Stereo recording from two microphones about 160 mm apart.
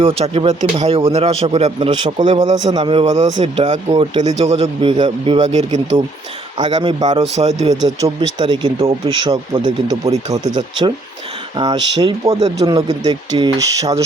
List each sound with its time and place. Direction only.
0.0 s speech: 35° right (ahead or behind)
3.1 s speech: 50° right (ahead or behind); by 5.4 s 30° right (ahead or behind)
5.4 s speech: 45° right (ahead or behind)
6.6 s speech: 30° right (ahead or behind)
7.2 s speech: 40° right (ahead or behind)
7.7 s speech: 25° right (ahead or behind)